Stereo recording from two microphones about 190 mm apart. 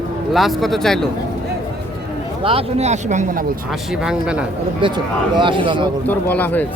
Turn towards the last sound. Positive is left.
turn(degrees=10)  # may be behind; listen again after turning